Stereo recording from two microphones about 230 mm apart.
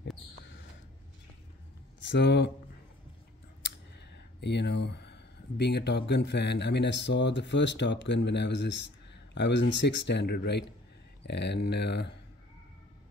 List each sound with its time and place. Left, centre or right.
2.0 s speech: left
4.4 s speech: left